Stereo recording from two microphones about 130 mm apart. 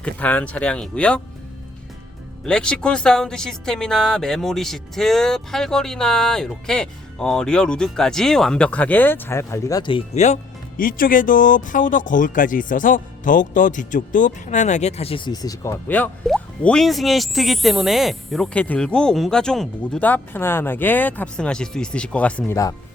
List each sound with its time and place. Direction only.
0.0 s speech: 10° left (ahead or behind)
2.4 s speech: 5° left (ahead or behind); by 9.8 s 25° left (ahead or behind)
10.2 s speech: 60° left (ahead or behind)
10.8 s speech: 90° left; by 15.3 s 45° left (ahead or behind)
15.3 s speech: 30° left (ahead or behind)
15.9 s speech: 10° left (ahead or behind)